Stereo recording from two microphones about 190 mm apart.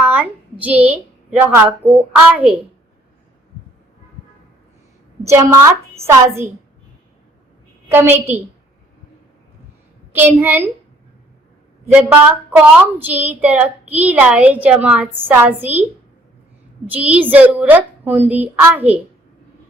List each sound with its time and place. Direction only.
0.0 s a sound: 10° right (ahead or behind)
0.6 s a woman's voice: 10° right (ahead or behind)
5.2 s a woman's voice: 15° right (ahead or behind)
7.9 s a woman's voice: 10° right (ahead or behind)
10.1 s a woman's voice: 10° right (ahead or behind)
11.9 s a woman's voice: 5° right (ahead or behind)
16.9 s a woman's voice: 5° right (ahead or behind)